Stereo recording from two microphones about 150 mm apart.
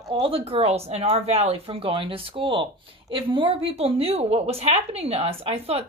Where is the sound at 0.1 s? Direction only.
35° right (ahead or behind).